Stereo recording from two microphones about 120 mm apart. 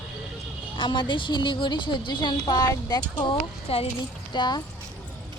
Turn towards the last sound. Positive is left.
turn(degrees=40)  # may be behind; listen again after turning